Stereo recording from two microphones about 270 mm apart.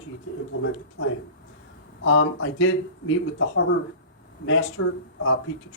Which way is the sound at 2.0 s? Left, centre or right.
Left.